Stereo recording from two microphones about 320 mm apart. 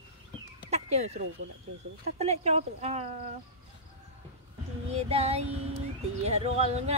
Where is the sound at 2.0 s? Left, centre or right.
Centre.